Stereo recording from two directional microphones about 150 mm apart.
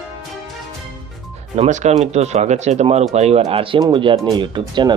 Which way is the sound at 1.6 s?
50° right (ahead or behind).